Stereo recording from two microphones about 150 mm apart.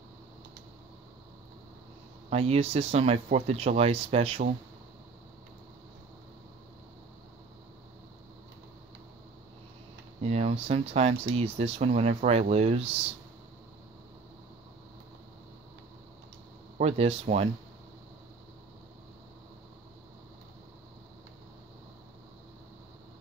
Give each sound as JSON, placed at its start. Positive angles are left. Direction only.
{"t": 2.2, "sound": "speech", "side_deg": -45}
{"t": 10.2, "sound": "speech", "side_deg": -45}
{"t": 16.7, "sound": "speech", "side_deg": -45}